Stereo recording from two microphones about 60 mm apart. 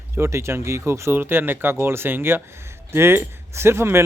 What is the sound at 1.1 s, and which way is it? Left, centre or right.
Speech, right.